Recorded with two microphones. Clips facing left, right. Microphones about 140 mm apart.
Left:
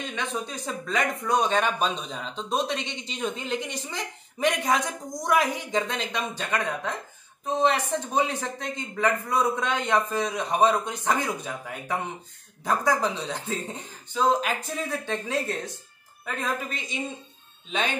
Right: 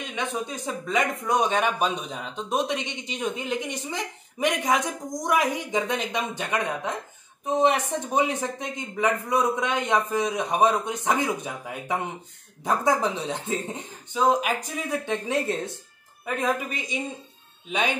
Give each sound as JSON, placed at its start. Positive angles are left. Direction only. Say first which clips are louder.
{"t": 0.0, "sound": "speech", "louder": "right 1 dB", "side_deg": -15}